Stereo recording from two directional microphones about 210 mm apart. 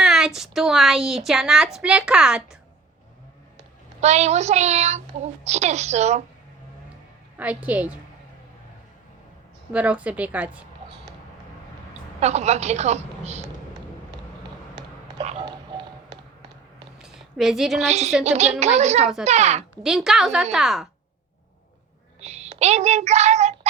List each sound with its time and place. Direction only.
0.0 s a woman's voice: 5° right (ahead or behind)
4.0 s a child's voice: 30° right (ahead or behind)
7.3 s a woman's voice: 5° right (ahead or behind)
9.7 s a woman's voice: 5° right (ahead or behind)
12.2 s a child's voice: 30° right (ahead or behind)
15.2 s a sound: 30° right (ahead or behind)
15.4 s tap: 20° right (ahead or behind)
17.0 s a sound: centre (ahead or behind)
17.8 s a child's voice: 30° right (ahead or behind)
19.7 s a woman's voice: centre (ahead or behind)
22.2 s child singing: 30° right (ahead or behind)